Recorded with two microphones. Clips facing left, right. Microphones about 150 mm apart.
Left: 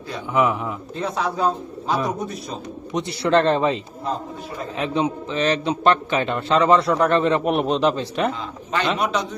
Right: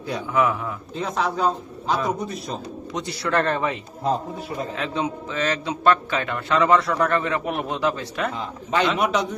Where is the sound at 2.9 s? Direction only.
25° left (ahead or behind).